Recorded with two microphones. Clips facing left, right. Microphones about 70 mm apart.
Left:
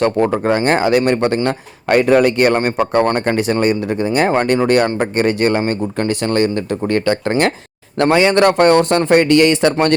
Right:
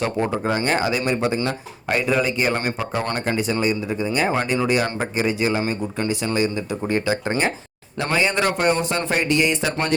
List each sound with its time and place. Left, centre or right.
0.0 s a man's voice: left